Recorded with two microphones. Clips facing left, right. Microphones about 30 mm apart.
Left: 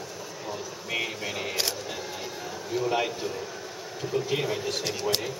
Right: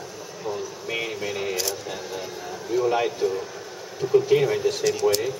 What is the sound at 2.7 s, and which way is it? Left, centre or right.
Speech, centre.